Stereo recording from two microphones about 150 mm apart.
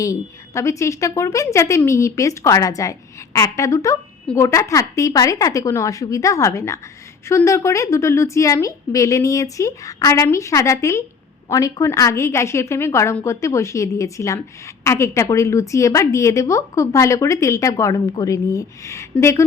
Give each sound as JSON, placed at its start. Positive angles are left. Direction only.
{"t": 0.0, "sound": "a woman's voice", "side_deg": 20}